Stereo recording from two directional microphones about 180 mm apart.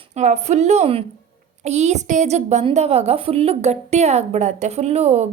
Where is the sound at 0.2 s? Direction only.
40° right (ahead or behind).